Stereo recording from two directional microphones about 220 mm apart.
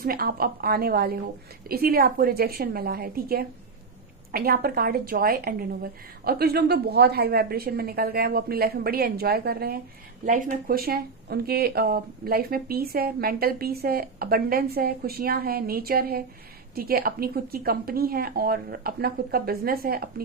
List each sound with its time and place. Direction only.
0.0 s speech: 45° right (ahead or behind)